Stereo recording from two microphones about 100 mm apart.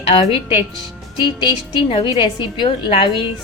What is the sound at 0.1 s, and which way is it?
Speech, 90° left.